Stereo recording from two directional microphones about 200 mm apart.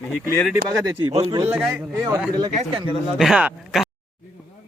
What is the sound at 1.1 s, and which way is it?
Speech, 30° right (ahead or behind).